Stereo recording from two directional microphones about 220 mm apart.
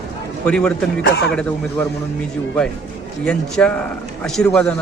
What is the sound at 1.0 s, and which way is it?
Speech, 50° left (ahead or behind).